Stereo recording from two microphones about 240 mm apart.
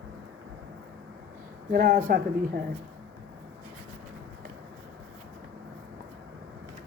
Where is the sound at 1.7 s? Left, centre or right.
Right.